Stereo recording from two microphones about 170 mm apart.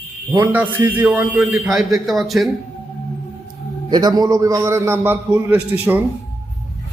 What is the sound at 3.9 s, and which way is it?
A man's voice, 25° right (ahead or behind).